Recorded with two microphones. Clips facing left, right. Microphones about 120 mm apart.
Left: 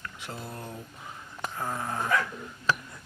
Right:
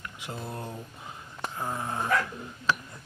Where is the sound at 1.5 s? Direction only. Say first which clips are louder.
Even; 15° right (ahead or behind).